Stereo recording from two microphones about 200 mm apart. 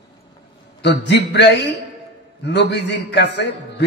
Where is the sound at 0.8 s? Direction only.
60° left (ahead or behind).